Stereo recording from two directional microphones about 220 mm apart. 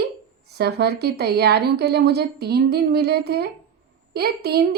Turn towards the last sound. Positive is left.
turn(degrees=-45)  # may be behind; listen again after turning